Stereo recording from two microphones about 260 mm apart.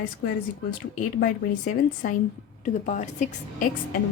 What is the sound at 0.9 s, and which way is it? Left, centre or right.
A woman's voice, left.